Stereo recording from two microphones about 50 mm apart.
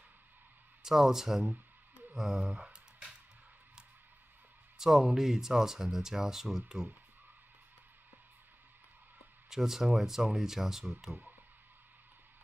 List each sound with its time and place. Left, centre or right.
0.8 s speech: centre
2.4 s a sound: right
4.7 s speech: centre
9.5 s speech: centre